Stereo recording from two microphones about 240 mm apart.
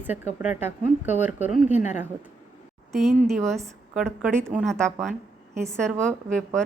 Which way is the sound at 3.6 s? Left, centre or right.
Centre.